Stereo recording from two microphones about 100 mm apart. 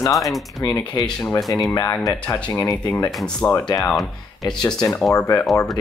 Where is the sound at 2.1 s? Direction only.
20° left (ahead or behind).